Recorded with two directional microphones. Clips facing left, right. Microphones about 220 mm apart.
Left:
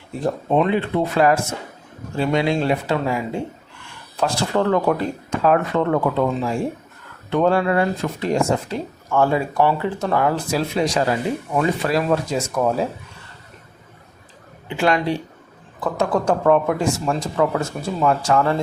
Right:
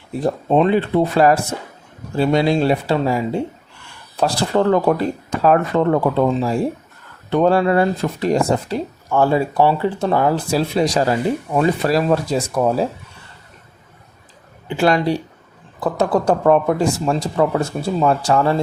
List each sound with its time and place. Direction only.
0.5 s speech: 35° right (ahead or behind)
14.8 s speech: 35° right (ahead or behind)